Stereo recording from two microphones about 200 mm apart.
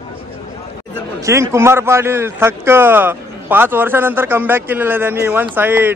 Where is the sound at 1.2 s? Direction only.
15° right (ahead or behind).